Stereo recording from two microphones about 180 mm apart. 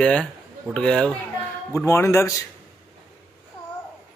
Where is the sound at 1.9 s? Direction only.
15° left (ahead or behind).